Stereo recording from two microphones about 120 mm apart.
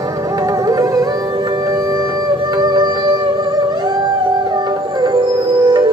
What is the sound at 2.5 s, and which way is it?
Music, 35° right (ahead or behind).